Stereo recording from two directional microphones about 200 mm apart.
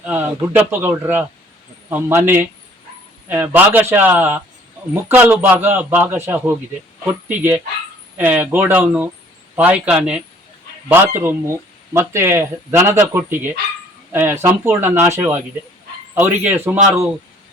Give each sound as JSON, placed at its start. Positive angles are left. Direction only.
{"t": 0.0, "sound": "speech", "side_deg": -10}